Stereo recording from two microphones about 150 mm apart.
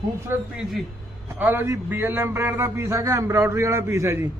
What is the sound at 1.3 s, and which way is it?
A man's voice, 15° right (ahead or behind).